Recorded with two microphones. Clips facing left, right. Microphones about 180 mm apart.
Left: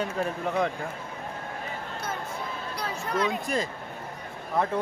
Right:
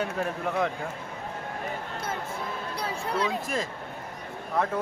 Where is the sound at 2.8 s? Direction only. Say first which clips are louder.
Left 1 dB; 30° right (ahead or behind).